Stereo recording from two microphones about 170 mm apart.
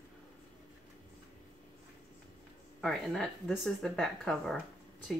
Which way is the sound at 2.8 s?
Centre (ahead or behind).